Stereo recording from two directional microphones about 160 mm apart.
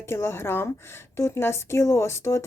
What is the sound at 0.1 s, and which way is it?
A woman's voice, 15° left (ahead or behind).